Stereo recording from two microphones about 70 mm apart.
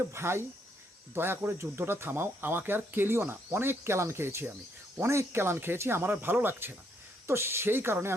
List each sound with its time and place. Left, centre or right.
0.0 s speech: right